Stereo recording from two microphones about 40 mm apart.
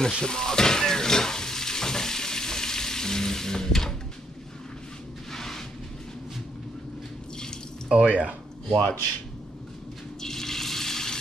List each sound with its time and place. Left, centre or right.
0.2 s stir: centre
5.3 s a sound: centre
7.9 s speech: right
8.6 s speech: centre
10.2 s toilet flush: centre